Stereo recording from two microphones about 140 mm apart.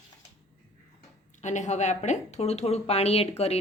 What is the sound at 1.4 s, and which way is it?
Speech, 60° left (ahead or behind).